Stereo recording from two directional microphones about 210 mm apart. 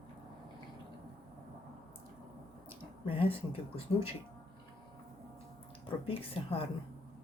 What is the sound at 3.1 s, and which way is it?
Speech, 25° left (ahead or behind).